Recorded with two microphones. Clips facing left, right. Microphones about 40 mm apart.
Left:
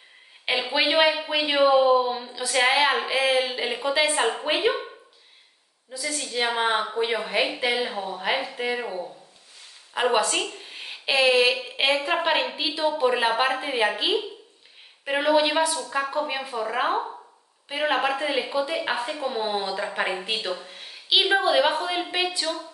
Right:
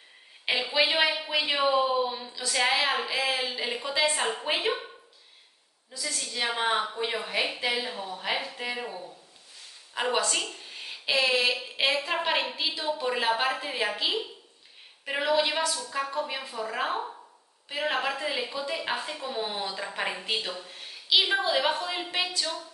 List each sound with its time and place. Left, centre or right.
0.5 s a woman's voice: centre
5.9 s a woman's voice: centre